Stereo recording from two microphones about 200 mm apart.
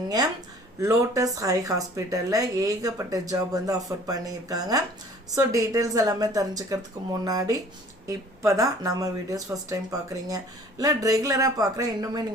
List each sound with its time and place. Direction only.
0.8 s speech: 15° right (ahead or behind)